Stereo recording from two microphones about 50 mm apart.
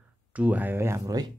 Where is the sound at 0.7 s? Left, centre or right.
Right.